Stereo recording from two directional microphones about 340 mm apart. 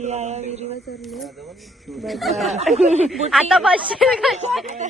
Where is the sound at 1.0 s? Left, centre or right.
Centre.